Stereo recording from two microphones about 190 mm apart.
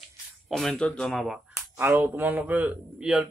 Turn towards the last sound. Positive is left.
turn(degrees=0)  # may be behind; listen again after turning